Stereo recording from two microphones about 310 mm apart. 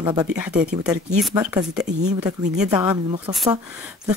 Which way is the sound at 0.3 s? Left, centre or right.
Centre.